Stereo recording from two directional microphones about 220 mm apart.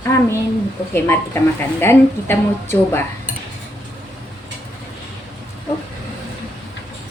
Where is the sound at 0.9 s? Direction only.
10° left (ahead or behind).